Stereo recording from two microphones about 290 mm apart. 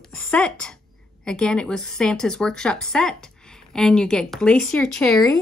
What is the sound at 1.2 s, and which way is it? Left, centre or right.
A woman's voice, centre.